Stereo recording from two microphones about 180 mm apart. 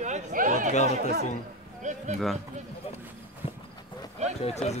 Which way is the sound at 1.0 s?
60° right (ahead or behind).